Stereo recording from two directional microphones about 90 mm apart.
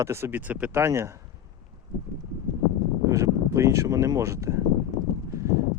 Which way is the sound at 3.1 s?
35° right (ahead or behind).